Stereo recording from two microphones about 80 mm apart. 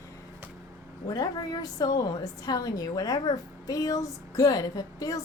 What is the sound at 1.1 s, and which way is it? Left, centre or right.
A woman's voice, left.